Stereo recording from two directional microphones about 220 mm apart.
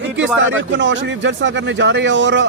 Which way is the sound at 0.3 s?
55° right (ahead or behind).